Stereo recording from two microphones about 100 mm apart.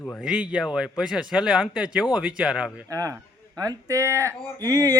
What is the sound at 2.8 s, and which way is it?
A man's voice, 35° right (ahead or behind).